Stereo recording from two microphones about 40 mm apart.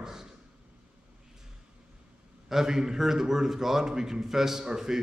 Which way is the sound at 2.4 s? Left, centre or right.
Centre.